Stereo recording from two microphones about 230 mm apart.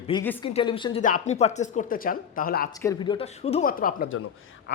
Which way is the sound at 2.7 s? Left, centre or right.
Centre.